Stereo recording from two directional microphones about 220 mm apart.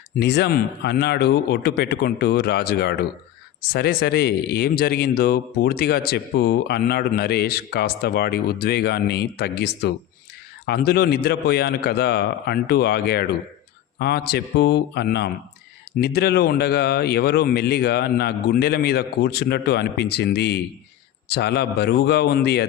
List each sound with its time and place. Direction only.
0.2 s speech: 50° left (ahead or behind)